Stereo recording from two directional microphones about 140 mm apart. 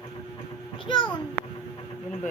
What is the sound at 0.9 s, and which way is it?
Speech, 35° left (ahead or behind).